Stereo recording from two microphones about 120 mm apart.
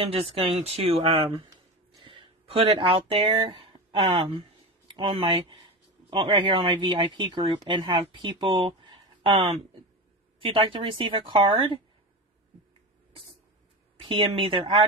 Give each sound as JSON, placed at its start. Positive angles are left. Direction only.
{"t": 0.0, "sound": "speech", "side_deg": -55}
{"t": 2.0, "sound": "a sound", "side_deg": -50}
{"t": 3.3, "sound": "speech", "side_deg": -45}
{"t": 13.9, "sound": "speech", "side_deg": -45}